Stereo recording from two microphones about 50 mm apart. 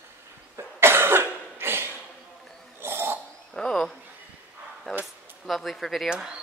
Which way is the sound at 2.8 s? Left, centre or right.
Right.